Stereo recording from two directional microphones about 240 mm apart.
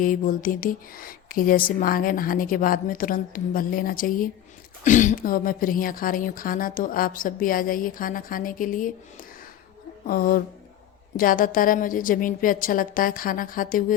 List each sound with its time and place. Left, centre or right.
0.0 s speech: left
10.1 s speech: left